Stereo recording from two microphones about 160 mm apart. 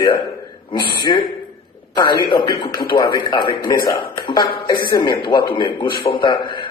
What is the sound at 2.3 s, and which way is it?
A man's voice, 30° left (ahead or behind).